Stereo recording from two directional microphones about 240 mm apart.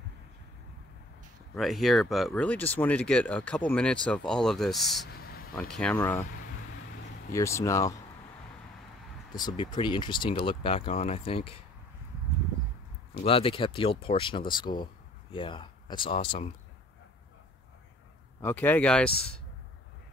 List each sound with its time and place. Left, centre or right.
1.5 s speech: centre
5.0 s a sound: left
5.6 s speech: centre
7.3 s speech: centre
9.4 s speech: centre
13.1 s speech: left
18.4 s speech: centre